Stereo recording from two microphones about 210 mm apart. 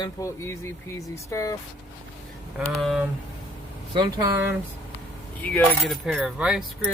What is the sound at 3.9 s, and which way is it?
Speech, 15° right (ahead or behind).